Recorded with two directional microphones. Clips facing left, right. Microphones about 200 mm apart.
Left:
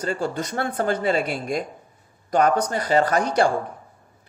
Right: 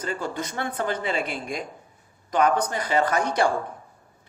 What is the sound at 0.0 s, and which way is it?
Speech, 40° left (ahead or behind).